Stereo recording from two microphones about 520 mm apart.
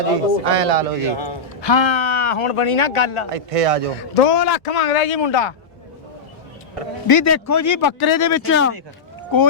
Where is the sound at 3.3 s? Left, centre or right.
Right.